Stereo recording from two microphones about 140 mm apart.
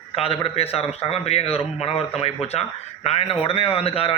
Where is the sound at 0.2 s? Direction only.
45° left (ahead or behind).